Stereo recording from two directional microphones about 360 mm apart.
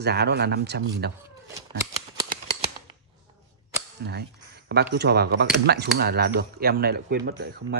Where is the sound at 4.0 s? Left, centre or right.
Right.